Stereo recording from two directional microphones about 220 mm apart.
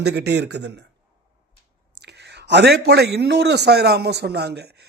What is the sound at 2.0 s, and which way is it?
A man's voice, 50° right (ahead or behind).